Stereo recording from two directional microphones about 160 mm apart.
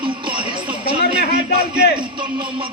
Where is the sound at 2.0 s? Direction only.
30° right (ahead or behind).